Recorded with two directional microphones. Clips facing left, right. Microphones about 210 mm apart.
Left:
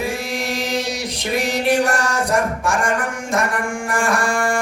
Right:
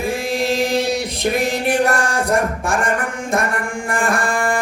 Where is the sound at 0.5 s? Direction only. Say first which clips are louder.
Right 5 dB; 55° right (ahead or behind).